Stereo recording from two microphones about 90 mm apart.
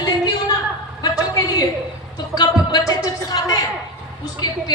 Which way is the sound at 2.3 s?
45° left (ahead or behind).